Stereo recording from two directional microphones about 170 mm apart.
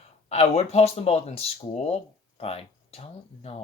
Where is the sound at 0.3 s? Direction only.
35° left (ahead or behind).